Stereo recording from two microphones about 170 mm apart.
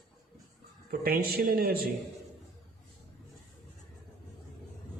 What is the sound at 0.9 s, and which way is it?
Speech, 60° right (ahead or behind).